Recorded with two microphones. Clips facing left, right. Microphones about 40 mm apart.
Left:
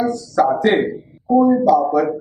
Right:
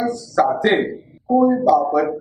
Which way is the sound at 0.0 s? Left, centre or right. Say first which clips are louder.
Left 1 dB; centre.